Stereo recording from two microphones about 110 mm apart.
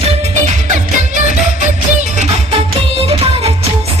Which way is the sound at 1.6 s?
90° right.